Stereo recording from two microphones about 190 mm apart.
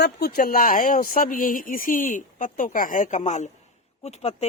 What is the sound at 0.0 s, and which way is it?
Speech, 55° left (ahead or behind).